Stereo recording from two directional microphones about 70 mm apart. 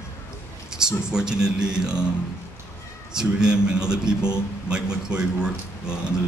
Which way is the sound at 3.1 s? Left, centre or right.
Centre.